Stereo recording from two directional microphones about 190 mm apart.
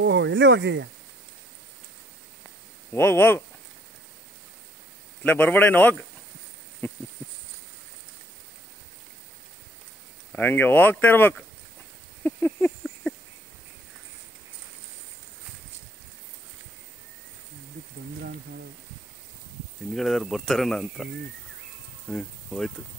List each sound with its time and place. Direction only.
0.0 s speech: 70° right (ahead or behind)
2.9 s speech: 10° left (ahead or behind)
5.2 s speech: 10° left (ahead or behind)
6.8 s a sound: 10° left (ahead or behind)
10.3 s speech: 10° left (ahead or behind)
12.2 s a sound: 10° left (ahead or behind)
19.9 s speech: centre (ahead or behind)
22.1 s speech: 5° left (ahead or behind)